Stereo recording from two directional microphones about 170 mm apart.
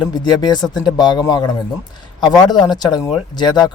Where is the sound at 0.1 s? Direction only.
25° left (ahead or behind).